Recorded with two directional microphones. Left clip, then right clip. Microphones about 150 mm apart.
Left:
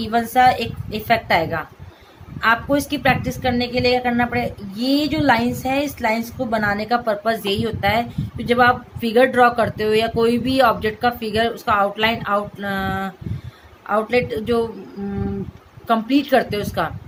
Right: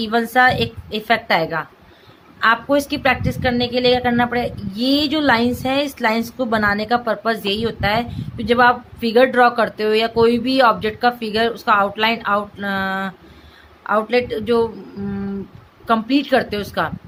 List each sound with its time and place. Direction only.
0.0 s a woman's voice: 30° right (ahead or behind)
15.9 s a woman's voice: 20° right (ahead or behind)